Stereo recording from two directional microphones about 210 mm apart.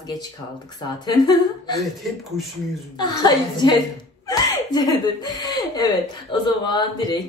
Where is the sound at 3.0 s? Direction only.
20° left (ahead or behind).